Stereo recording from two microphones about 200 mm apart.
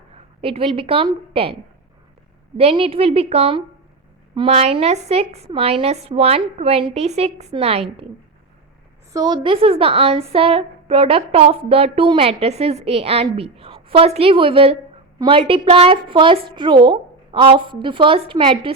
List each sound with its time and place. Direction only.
0.1 s a woman's voice: 30° right (ahead or behind)
2.6 s a woman's voice: 30° right (ahead or behind)
9.1 s a woman's voice: 20° right (ahead or behind)